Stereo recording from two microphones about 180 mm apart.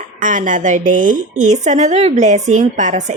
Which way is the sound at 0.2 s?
45° right (ahead or behind).